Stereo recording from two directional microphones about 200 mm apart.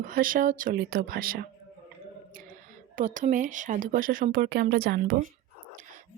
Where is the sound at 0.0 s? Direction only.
45° right (ahead or behind).